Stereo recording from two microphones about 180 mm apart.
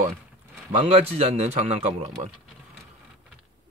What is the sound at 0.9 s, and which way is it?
Speech, 35° right (ahead or behind).